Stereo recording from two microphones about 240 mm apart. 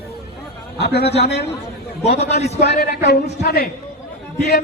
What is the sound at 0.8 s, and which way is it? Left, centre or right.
Speech, left.